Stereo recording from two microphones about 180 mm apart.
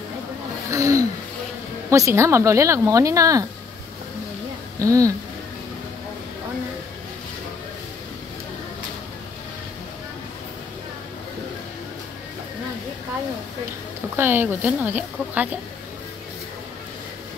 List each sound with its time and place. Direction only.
0.7 s a sound: 15° right (ahead or behind)
1.9 s speech: 15° right (ahead or behind)
4.7 s speech: 20° right (ahead or behind)
14.1 s speech: 10° right (ahead or behind)